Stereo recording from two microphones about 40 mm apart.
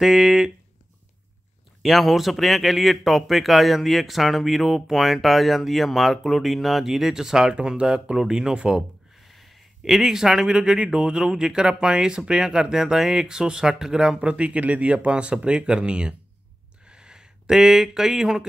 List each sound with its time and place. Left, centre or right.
0.0 s a man's voice: centre
1.8 s a man's voice: centre
9.3 s speech: centre
14.2 s speech: right
16.8 s a sound: right
17.8 s speech: centre